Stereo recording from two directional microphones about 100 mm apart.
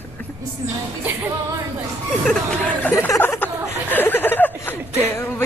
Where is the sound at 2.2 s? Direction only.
5° left (ahead or behind).